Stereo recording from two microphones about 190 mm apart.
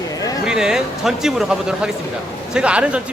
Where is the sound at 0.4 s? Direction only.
5° right (ahead or behind).